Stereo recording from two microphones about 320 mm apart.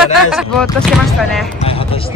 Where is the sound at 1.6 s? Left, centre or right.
Centre.